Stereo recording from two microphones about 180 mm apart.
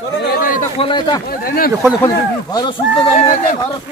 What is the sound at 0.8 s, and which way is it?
Speech, 25° left (ahead or behind).